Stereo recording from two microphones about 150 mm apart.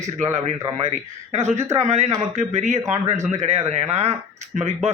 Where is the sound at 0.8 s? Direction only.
45° right (ahead or behind).